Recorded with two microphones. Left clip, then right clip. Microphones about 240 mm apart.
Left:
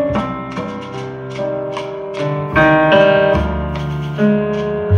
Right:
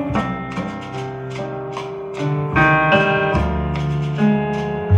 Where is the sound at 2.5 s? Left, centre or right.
Centre.